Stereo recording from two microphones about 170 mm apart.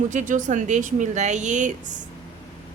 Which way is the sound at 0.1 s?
50° right (ahead or behind).